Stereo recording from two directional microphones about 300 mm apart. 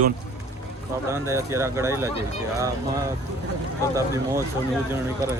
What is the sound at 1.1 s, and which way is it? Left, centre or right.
Speech, centre.